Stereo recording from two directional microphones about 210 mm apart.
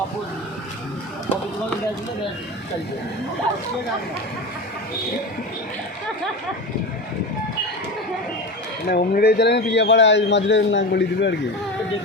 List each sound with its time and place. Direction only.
8.9 s speech: 50° left (ahead or behind)